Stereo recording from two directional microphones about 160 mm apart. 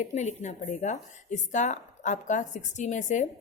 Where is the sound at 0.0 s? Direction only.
45° left (ahead or behind).